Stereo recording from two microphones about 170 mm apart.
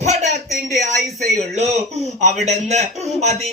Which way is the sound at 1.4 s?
40° right (ahead or behind).